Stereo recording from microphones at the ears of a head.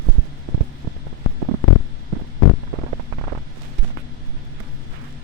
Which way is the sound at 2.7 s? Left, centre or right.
Right.